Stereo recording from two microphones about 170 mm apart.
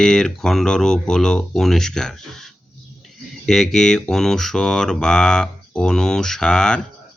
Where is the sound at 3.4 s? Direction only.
5° left (ahead or behind).